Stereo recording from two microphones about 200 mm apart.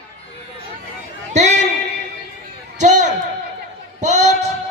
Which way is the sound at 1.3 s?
35° right (ahead or behind).